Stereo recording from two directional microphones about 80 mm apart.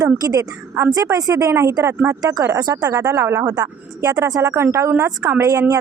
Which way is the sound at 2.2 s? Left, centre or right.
Right.